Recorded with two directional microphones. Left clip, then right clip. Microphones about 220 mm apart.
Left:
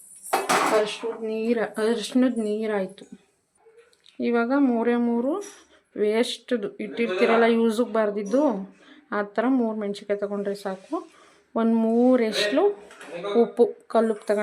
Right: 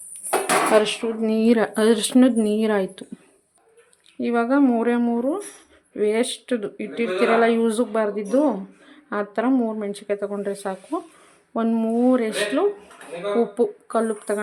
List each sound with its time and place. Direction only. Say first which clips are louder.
1.2 s speech: right 6 dB; 45° right (ahead or behind); by 3.1 s 25° right (ahead or behind)
4.2 s speech: right 3 dB; 5° right (ahead or behind)